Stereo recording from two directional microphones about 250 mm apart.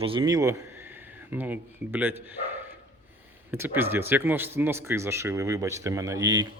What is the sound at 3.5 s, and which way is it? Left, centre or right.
Speech, centre.